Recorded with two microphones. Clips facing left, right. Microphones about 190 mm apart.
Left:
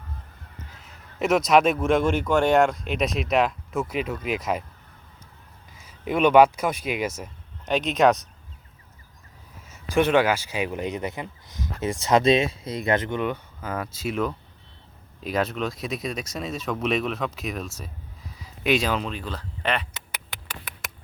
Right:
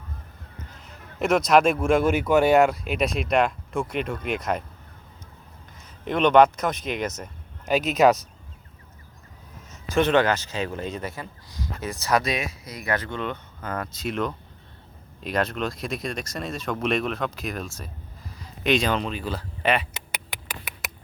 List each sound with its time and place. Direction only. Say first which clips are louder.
0.8 s a man's voice: even; centre (ahead or behind)
5.8 s speech: left 1 dB; 5° left (ahead or behind)
7.6 s a man's voice: right 1 dB; 5° right (ahead or behind)
9.9 s speech: even; 10° left (ahead or behind); by 20.9 s 10° right (ahead or behind)